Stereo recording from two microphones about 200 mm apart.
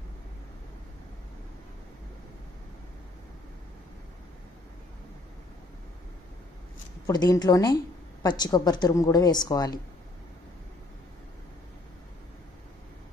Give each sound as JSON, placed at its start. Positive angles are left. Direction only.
{"t": 7.1, "sound": "a woman's voice", "side_deg": 20}